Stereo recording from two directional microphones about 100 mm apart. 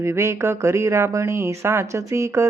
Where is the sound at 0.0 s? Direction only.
30° right (ahead or behind).